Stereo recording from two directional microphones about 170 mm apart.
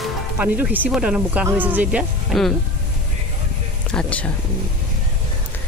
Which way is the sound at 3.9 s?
5° left (ahead or behind).